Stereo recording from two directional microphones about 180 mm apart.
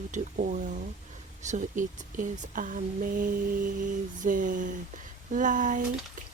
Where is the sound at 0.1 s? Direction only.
45° right (ahead or behind).